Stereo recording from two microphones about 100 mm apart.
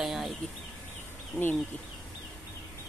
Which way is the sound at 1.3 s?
30° left (ahead or behind).